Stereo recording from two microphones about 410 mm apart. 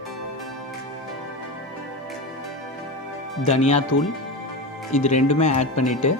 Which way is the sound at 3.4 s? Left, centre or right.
Centre.